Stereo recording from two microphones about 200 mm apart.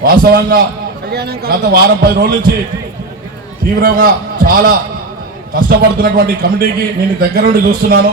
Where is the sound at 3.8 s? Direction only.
45° right (ahead or behind).